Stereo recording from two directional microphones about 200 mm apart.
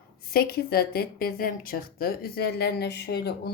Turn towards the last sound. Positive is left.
turn(degrees=55)  # may be behind; listen again after turning